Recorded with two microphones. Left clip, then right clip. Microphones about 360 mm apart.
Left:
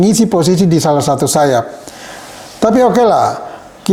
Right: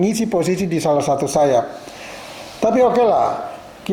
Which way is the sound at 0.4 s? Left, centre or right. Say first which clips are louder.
Left 8 dB; left.